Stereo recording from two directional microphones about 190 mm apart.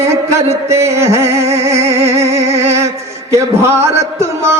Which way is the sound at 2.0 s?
35° right (ahead or behind).